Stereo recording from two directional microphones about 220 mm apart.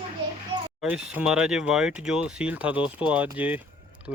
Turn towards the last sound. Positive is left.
turn(degrees=-5)  # may be behind; listen again after turning